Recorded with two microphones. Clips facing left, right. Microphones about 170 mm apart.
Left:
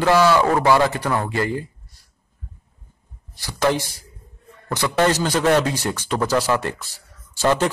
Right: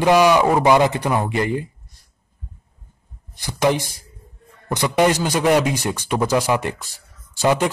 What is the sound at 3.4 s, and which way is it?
A man's voice, 15° right (ahead or behind).